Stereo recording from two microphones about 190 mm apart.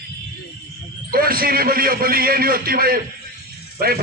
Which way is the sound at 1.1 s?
50° right (ahead or behind).